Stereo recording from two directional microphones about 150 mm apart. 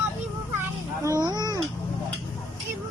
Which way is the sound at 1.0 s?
25° right (ahead or behind).